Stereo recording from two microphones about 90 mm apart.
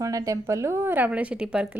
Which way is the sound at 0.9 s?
15° right (ahead or behind).